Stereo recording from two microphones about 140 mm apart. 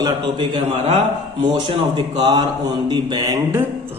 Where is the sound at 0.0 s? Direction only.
35° right (ahead or behind).